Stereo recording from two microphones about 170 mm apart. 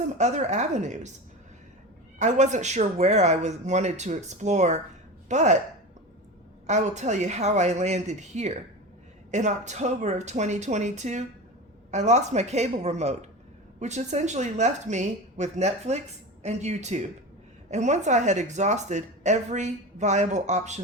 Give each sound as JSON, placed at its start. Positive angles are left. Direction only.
{"t": 0.2, "sound": "speech", "side_deg": -40}
{"t": 2.1, "sound": "speech", "side_deg": -45}
{"t": 6.7, "sound": "a woman's voice", "side_deg": -45}